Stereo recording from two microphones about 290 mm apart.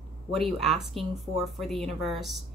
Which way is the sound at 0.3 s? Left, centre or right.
Centre.